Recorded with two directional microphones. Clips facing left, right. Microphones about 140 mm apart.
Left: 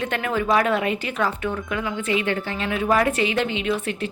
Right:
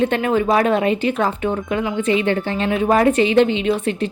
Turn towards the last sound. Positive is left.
turn(degrees=-30)  # may be behind; listen again after turning